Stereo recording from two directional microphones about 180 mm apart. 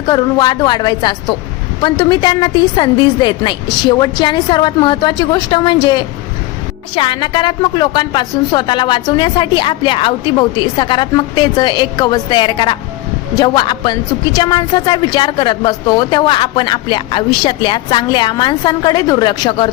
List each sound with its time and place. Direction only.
0.1 s a woman's voice: 25° left (ahead or behind)